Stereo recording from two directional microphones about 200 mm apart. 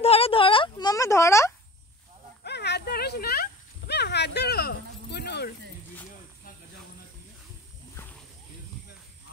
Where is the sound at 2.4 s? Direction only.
55° left (ahead or behind).